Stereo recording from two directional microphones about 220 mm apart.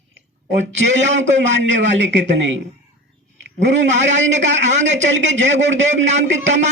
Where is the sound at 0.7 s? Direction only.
55° right (ahead or behind).